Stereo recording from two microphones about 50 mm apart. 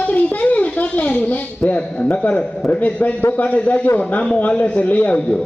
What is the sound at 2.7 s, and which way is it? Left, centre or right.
Child singing, left.